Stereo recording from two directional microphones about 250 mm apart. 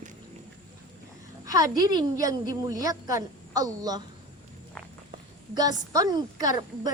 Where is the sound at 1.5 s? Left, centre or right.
Centre.